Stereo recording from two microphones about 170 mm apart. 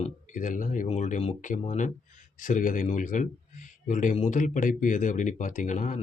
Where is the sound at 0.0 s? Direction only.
50° left (ahead or behind).